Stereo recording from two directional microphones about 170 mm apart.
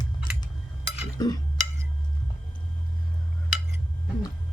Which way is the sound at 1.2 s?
20° left (ahead or behind).